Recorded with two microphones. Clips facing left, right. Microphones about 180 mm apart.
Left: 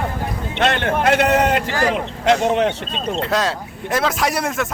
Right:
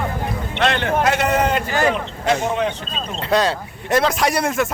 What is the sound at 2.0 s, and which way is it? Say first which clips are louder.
Speech: left 3 dB; 70° left (ahead or behind).